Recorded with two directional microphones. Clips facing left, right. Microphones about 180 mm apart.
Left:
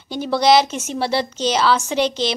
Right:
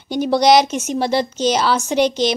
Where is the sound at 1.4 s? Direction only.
45° right (ahead or behind).